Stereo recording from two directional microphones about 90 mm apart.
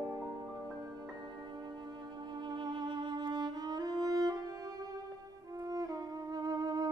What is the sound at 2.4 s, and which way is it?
Music, 55° right (ahead or behind).